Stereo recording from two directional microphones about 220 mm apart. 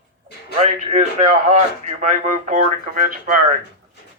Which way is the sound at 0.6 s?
30° right (ahead or behind).